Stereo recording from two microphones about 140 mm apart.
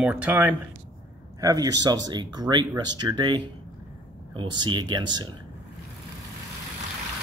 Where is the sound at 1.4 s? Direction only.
25° right (ahead or behind).